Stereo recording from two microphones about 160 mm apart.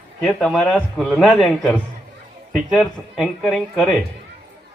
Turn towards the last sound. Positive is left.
turn(degrees=0)  # may be behind; listen again after turning